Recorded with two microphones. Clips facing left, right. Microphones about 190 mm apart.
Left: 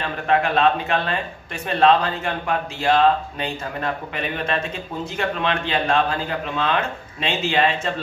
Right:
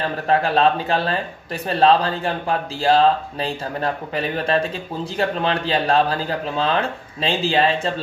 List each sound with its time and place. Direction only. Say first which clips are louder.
0.0 s speech: right 1 dB; 35° right (ahead or behind)